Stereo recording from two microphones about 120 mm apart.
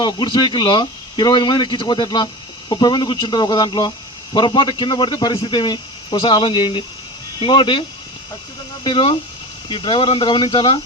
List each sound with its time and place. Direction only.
0.0 s speech: 40° left (ahead or behind)